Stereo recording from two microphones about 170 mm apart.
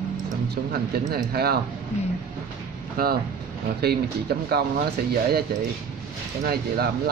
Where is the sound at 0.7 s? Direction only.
65° right (ahead or behind).